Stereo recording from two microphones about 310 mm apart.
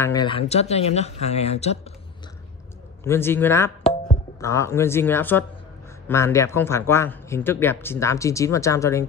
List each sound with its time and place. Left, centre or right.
0.0 s speech: centre
3.0 s speech: centre